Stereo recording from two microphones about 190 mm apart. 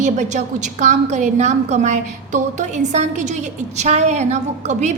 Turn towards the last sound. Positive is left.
turn(degrees=-35)  # may be behind; listen again after turning